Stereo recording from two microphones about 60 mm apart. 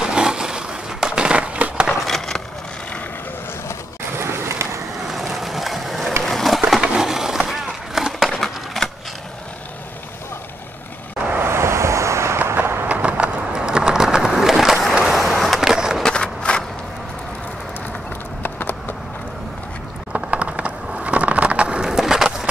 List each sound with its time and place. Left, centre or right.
0.0 s skateboard: centre
1.9 s skateboard: centre
4.2 s skateboard: right
5.0 s ratchet: centre
6.2 s skateboard: centre
8.3 s skateboard: centre
11.3 s vehicle: right
12.5 s a sound: right
12.8 s a sound: right; by 15.0 s centre
15.0 s skateboard: centre
16.0 s a sound: centre
18.4 s clip-clop: left
20.1 s a sound: centre
21.9 s skateboard: centre